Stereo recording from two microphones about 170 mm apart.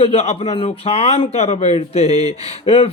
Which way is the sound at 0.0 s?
35° left (ahead or behind).